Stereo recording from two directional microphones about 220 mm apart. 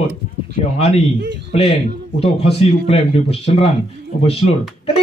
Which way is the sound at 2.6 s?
25° left (ahead or behind).